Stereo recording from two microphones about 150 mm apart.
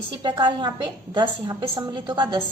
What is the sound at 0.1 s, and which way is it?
Speech, 30° right (ahead or behind).